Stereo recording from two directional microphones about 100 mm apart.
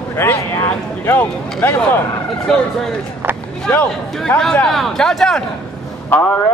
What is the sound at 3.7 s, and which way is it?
A man's voice, 15° left (ahead or behind).